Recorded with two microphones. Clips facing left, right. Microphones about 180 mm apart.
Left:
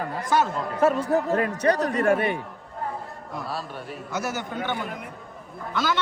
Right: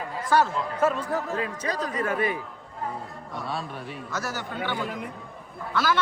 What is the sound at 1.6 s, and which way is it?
Speech, 70° left (ahead or behind).